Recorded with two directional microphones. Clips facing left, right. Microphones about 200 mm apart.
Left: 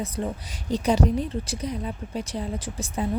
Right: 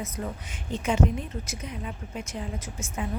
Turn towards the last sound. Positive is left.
turn(degrees=35)  # may be behind; listen again after turning